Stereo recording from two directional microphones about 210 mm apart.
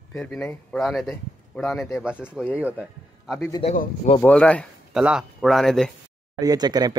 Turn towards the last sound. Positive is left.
turn(degrees=-20)  # may be behind; listen again after turning